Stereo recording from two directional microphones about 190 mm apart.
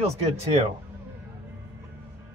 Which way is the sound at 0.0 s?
30° right (ahead or behind).